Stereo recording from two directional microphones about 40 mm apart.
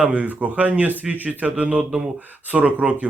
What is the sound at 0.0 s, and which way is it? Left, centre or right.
Speech, right.